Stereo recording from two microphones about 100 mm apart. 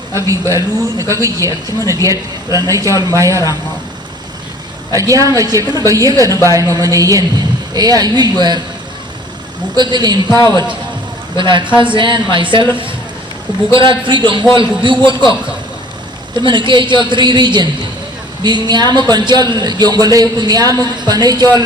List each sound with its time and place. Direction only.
0.2 s a man's voice: 30° right (ahead or behind)
4.9 s a man's voice: 35° right (ahead or behind)
9.7 s a man's voice: 45° right (ahead or behind)
10.3 s a man's voice: 35° left (ahead or behind)
11.3 s a man's voice: 50° right (ahead or behind)
14.1 s a man's voice: 50° right (ahead or behind)
16.5 s a man's voice: 50° right (ahead or behind)